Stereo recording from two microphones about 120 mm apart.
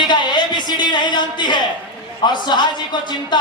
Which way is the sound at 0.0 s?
40° left (ahead or behind).